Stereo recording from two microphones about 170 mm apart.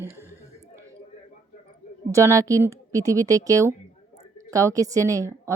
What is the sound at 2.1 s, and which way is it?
Speech, 20° right (ahead or behind).